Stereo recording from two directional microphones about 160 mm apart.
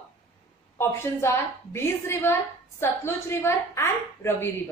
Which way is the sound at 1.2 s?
15° left (ahead or behind).